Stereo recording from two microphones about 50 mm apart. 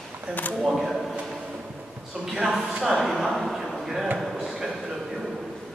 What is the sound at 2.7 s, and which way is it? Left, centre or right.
Speech, centre.